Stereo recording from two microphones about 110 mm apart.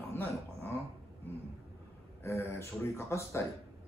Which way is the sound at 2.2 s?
25° left (ahead or behind).